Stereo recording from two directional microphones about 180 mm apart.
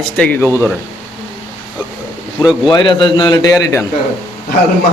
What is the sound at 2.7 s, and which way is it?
A man's voice, 25° left (ahead or behind).